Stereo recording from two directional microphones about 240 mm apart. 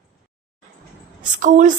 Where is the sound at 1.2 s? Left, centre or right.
Right.